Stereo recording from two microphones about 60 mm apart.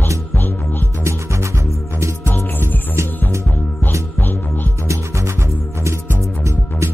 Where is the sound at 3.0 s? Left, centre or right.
Right.